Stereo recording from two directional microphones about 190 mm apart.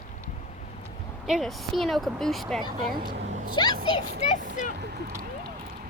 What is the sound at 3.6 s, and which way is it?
Speech, 20° left (ahead or behind).